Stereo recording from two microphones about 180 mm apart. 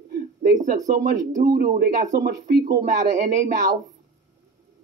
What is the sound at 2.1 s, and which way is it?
Speech, 60° right (ahead or behind).